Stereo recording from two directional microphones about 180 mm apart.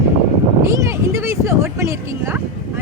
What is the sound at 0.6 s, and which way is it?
Speech, 15° right (ahead or behind).